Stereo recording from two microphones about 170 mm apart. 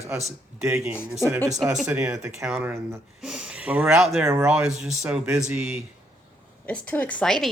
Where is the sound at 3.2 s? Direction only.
5° right (ahead or behind).